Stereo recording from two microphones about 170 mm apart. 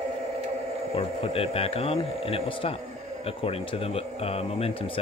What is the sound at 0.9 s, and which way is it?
Speech, 35° left (ahead or behind).